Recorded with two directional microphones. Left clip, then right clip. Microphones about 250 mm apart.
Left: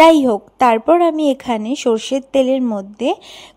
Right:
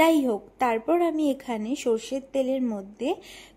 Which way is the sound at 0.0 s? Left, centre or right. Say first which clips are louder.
Left 12 dB; left.